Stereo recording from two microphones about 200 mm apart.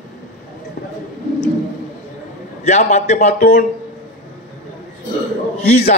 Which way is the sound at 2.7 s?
35° left (ahead or behind).